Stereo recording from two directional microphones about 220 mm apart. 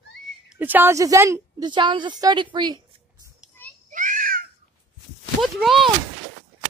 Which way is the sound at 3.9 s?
35° right (ahead or behind).